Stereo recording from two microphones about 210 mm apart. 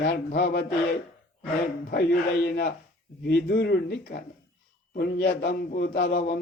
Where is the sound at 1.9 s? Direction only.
50° left (ahead or behind).